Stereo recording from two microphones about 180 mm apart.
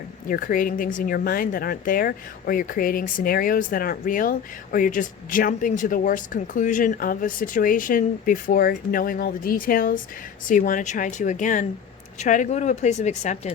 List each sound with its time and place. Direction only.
0.3 s speech: 50° left (ahead or behind)